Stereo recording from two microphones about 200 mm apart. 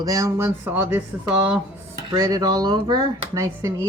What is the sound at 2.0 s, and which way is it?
Speech, 20° right (ahead or behind).